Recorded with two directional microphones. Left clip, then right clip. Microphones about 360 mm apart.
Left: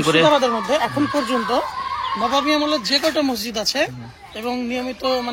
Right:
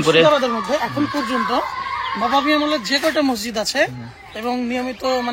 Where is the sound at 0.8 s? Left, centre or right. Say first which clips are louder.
Left 1 dB; left.